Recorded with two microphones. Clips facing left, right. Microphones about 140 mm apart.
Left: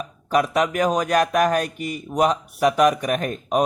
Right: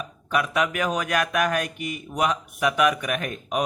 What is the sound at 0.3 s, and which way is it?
A man's voice, 40° left (ahead or behind).